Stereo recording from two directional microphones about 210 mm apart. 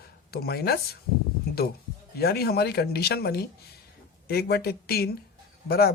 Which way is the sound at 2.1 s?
50° left (ahead or behind).